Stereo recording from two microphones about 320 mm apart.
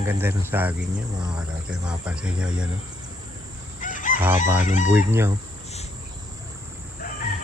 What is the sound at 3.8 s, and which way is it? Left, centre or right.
Fowl, left.